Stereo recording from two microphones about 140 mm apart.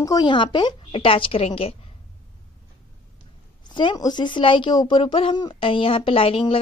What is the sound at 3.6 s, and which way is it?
Speech, 35° left (ahead or behind).